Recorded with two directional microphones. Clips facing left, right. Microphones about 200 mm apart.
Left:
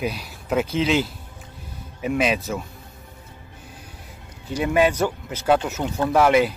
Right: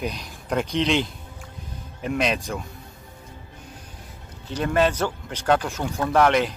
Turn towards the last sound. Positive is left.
turn(degrees=10)  # may be behind; listen again after turning